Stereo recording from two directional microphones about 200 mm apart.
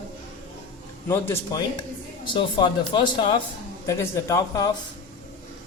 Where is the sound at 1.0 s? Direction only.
10° left (ahead or behind).